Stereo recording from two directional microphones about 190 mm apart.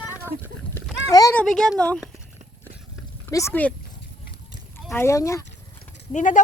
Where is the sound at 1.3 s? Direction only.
5° left (ahead or behind).